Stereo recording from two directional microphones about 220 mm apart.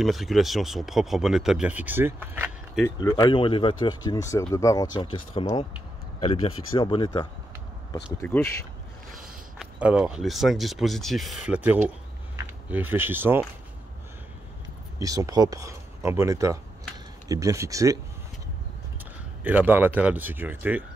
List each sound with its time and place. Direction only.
0.0 s speech: centre (ahead or behind)
2.8 s speech: 15° left (ahead or behind)
7.9 s speech: 10° left (ahead or behind)
9.6 s speech: 5° right (ahead or behind)
15.0 s speech: 15° right (ahead or behind)
19.4 s speech: 10° right (ahead or behind)